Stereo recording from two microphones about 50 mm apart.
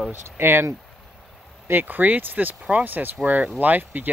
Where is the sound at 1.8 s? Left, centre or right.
Right.